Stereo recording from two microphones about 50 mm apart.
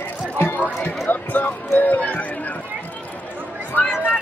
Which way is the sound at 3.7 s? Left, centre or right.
Left.